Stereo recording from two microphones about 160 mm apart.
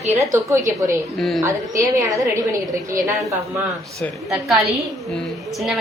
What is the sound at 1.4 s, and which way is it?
Speech, 20° right (ahead or behind).